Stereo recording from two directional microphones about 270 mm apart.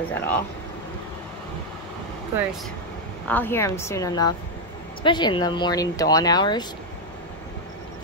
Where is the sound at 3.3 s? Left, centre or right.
Centre.